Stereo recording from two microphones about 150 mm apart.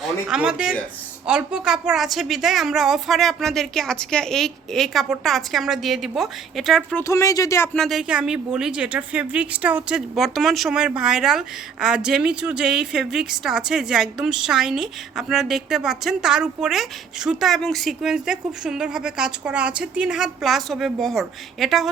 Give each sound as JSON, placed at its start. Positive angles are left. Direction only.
{"t": 0.0, "sound": "speech", "side_deg": -5}
{"t": 7.0, "sound": "speech", "side_deg": 20}
{"t": 7.7, "sound": "a woman's voice", "side_deg": 0}